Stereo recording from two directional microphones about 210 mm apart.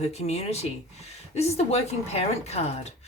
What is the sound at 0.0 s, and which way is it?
Speech, 30° left (ahead or behind).